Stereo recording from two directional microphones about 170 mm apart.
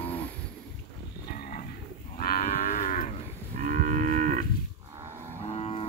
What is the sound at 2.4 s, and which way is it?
Moo, 45° left (ahead or behind).